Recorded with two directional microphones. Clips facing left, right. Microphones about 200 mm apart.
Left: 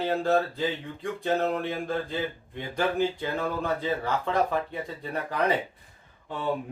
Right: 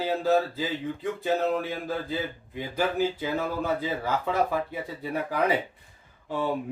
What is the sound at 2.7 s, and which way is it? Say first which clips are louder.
Speech: even; 5° right (ahead or behind).